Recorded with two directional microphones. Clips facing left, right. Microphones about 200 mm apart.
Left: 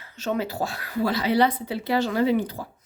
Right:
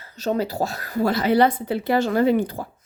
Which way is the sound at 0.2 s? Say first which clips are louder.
Right 3 dB; 35° right (ahead or behind).